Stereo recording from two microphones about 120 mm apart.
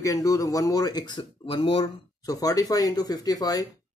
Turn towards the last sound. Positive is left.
turn(degrees=30)  # may be behind; listen again after turning